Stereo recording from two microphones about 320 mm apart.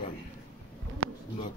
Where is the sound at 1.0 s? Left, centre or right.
Right.